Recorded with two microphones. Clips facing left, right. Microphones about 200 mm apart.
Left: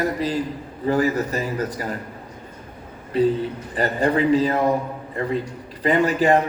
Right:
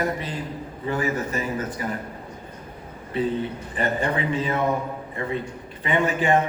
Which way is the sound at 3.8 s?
35° left (ahead or behind).